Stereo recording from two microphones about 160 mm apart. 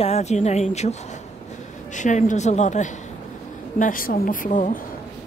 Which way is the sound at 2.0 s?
50° left (ahead or behind).